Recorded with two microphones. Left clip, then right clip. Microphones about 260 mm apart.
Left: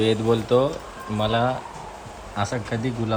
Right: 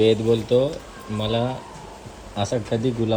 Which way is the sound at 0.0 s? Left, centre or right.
Centre.